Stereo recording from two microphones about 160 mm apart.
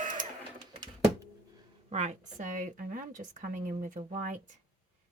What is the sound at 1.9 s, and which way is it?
A woman's voice, 45° right (ahead or behind).